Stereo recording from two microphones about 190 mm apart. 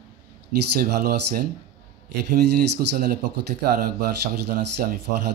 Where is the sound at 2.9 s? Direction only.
50° right (ahead or behind).